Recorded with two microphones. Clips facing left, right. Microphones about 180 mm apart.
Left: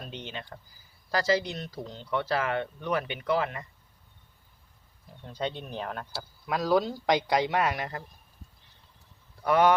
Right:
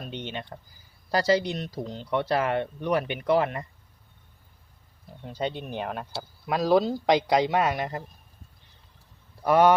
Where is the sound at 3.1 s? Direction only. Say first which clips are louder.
Right 5 dB; 45° right (ahead or behind).